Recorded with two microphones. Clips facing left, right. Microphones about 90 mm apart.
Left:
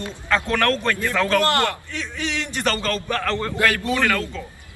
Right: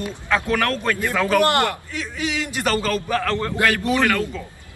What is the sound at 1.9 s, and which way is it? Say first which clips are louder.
A man's voice: right 2 dB; 5° right (ahead or behind).